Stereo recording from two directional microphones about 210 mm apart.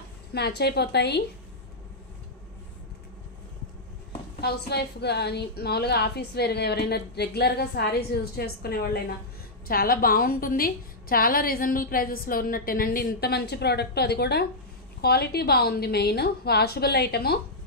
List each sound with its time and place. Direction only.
0.3 s a woman's voice: 50° left (ahead or behind)
4.4 s a woman's voice: 50° left (ahead or behind)